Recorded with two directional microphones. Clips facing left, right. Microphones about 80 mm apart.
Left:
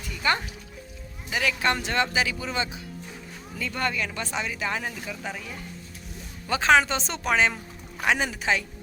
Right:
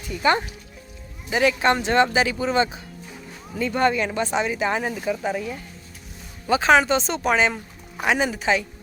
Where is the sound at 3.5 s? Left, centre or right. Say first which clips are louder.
Right 8 dB; right.